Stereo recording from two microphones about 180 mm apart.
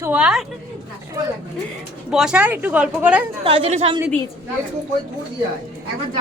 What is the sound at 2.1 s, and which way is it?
Speech, 5° right (ahead or behind).